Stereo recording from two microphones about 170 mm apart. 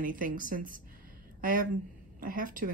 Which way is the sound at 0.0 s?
55° right (ahead or behind).